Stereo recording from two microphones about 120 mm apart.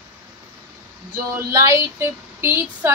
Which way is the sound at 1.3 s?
25° right (ahead or behind).